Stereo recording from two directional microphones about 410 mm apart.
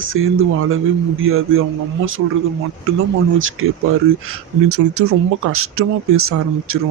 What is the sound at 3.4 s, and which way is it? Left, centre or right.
Speech, right.